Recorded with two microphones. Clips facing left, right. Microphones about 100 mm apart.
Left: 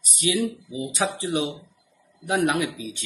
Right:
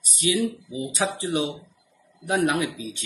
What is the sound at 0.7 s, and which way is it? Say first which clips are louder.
Speech: left 1 dB; 30° left (ahead or behind).